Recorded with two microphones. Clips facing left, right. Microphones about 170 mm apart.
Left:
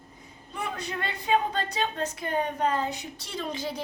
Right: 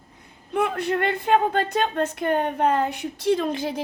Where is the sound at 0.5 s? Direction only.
60° right (ahead or behind).